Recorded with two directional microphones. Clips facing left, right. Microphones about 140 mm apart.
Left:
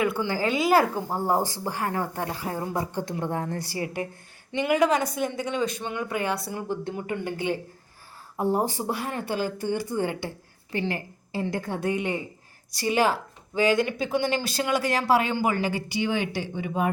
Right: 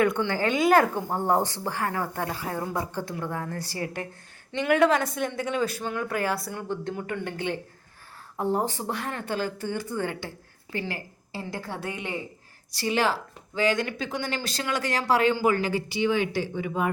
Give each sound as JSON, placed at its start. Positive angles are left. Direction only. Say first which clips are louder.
{"t": 0.0, "sound": "speech", "louder": "right 1 dB", "side_deg": 10}
{"t": 3.6, "sound": "speech", "louder": "left 2 dB", "side_deg": 15}